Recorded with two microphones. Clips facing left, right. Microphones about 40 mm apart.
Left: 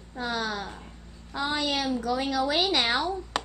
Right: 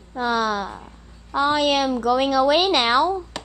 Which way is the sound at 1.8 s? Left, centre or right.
Right.